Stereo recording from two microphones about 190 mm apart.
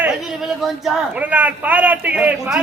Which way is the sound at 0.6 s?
Centre (ahead or behind).